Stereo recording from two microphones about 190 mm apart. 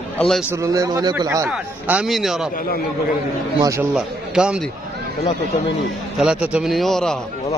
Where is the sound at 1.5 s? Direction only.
5° right (ahead or behind).